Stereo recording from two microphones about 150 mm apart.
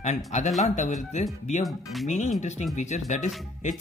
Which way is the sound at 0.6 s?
55° left (ahead or behind).